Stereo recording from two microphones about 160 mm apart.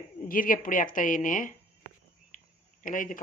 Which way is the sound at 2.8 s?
55° left (ahead or behind).